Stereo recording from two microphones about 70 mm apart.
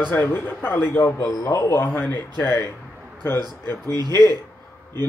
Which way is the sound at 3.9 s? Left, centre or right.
Right.